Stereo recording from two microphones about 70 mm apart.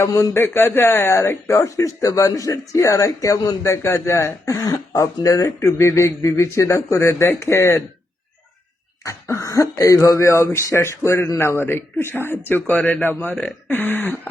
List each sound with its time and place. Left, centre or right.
0.0 s speech: left
0.3 s speech: left
9.0 s speech: left
12.7 s a man's voice: centre